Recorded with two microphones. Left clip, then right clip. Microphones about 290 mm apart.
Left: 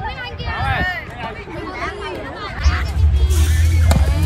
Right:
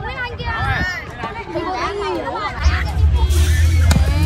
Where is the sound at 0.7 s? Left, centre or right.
Left.